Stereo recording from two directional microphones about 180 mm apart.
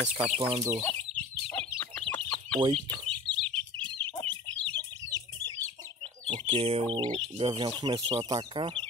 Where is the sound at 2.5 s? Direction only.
30° right (ahead or behind).